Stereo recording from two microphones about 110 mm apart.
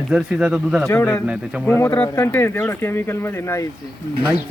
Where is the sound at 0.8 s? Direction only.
20° left (ahead or behind).